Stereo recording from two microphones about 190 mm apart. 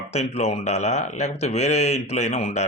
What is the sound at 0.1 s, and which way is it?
Speech, 35° left (ahead or behind).